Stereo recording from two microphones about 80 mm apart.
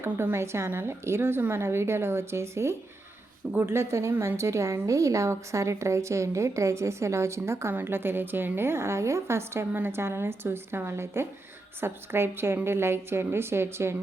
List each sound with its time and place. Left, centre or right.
0.0 s a woman's voice: right